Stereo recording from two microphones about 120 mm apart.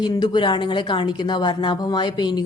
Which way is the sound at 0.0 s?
40° left (ahead or behind).